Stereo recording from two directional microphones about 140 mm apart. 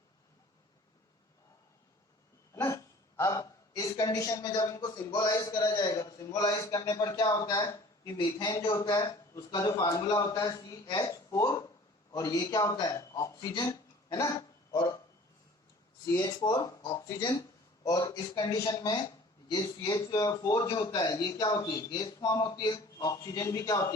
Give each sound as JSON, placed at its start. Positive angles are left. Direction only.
{"t": 2.6, "sound": "a woman's voice", "side_deg": 20}
{"t": 16.1, "sound": "speech", "side_deg": 25}